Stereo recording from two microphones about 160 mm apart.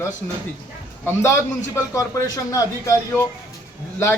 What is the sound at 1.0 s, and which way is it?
A man's voice, 15° left (ahead or behind).